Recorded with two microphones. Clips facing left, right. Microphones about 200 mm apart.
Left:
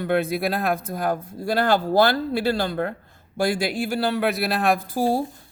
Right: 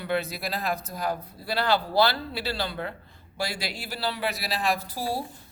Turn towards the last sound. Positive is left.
turn(degrees=50)  # may be behind; listen again after turning